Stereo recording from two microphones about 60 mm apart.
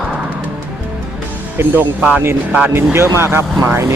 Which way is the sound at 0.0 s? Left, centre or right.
Centre.